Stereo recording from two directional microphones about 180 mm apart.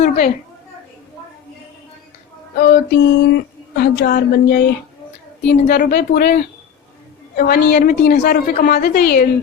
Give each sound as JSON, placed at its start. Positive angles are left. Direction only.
{"t": 2.6, "sound": "speech", "side_deg": 65}